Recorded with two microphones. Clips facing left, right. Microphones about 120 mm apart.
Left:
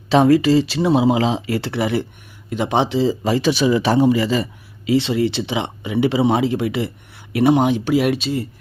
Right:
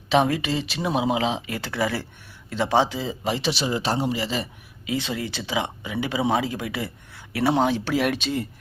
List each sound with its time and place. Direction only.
0.1 s speech: 35° left (ahead or behind)
3.7 s a man's voice: 65° left (ahead or behind)
4.0 s a man's voice: 45° left (ahead or behind)
4.9 s speech: 30° left (ahead or behind); by 8.4 s 5° left (ahead or behind)